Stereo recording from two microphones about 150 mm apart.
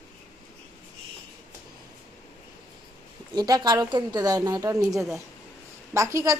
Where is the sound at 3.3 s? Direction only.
25° right (ahead or behind).